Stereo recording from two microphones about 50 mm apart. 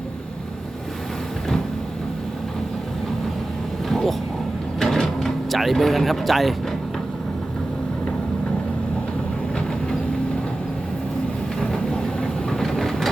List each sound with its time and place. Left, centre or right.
3.8 s vehicle: centre
4.8 s a sound: centre
11.6 s vehicle: centre